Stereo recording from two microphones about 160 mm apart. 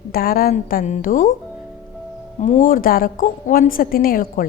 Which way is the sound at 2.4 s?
50° left (ahead or behind).